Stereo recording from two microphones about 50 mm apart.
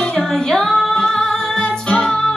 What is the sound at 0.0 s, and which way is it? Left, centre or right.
Music, centre.